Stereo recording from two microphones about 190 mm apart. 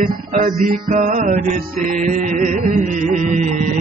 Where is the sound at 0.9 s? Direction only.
40° right (ahead or behind).